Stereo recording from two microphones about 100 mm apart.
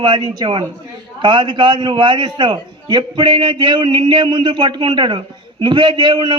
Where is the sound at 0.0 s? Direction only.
50° right (ahead or behind).